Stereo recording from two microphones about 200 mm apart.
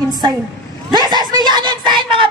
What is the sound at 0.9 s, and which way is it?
Speech, 20° right (ahead or behind).